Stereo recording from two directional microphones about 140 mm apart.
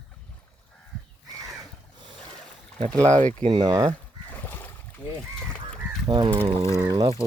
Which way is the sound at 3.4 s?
35° right (ahead or behind).